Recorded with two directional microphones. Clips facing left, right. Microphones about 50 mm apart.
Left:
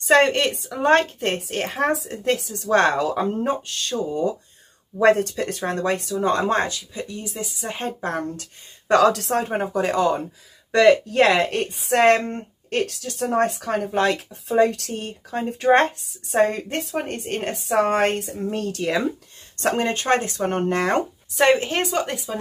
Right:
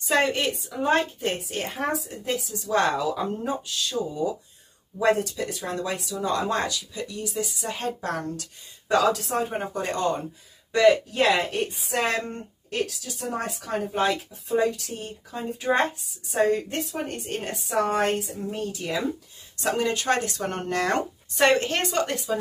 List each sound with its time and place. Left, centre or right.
0.0 s a woman's voice: left
8.8 s a woman's voice: left
10.7 s a woman's voice: left
13.9 s a woman's voice: left
19.5 s speech: left
21.3 s a woman's voice: centre